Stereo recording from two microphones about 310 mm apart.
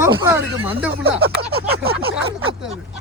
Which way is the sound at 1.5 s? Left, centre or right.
Right.